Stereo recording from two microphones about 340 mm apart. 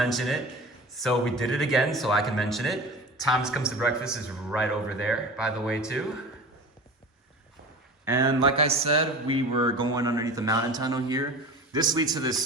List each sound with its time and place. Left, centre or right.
0.0 s speech: centre
8.0 s speech: centre